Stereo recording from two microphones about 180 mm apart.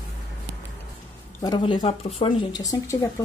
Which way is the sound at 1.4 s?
25° left (ahead or behind).